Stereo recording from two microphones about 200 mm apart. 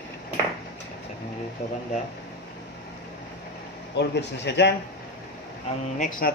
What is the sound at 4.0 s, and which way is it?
Speech, 60° left (ahead or behind).